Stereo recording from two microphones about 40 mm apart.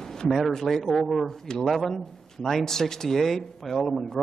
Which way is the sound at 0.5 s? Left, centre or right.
Centre.